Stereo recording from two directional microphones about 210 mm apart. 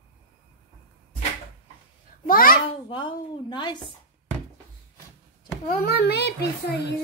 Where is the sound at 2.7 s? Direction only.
25° left (ahead or behind).